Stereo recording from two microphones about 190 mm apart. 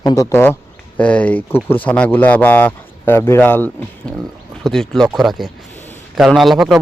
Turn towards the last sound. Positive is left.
turn(degrees=0)  # may be behind; listen again after turning